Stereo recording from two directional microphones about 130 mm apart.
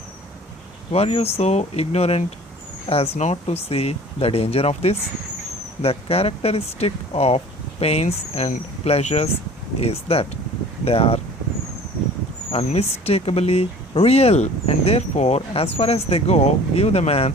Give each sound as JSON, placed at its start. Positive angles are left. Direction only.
{"t": 0.9, "sound": "speech", "side_deg": 50}
{"t": 12.5, "sound": "speech", "side_deg": 50}